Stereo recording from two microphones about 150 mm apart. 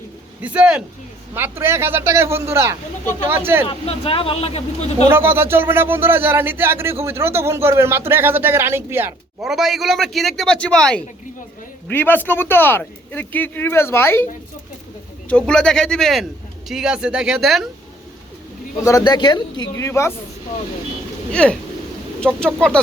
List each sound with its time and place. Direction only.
0.4 s speech: 5° right (ahead or behind)
3.7 s speech: 35° left (ahead or behind)
5.1 s speech: 15° right (ahead or behind)
9.4 s a man's voice: centre (ahead or behind); by 14.3 s 15° left (ahead or behind)
15.3 s a man's voice: 5° left (ahead or behind)
18.9 s a man's voice: 25° left (ahead or behind)
21.3 s speech: 5° left (ahead or behind)